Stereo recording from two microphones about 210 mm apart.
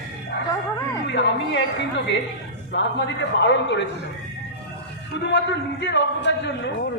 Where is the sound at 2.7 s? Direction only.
55° left (ahead or behind).